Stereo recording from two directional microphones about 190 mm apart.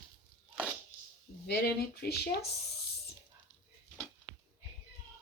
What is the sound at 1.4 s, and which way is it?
Speech, 60° left (ahead or behind).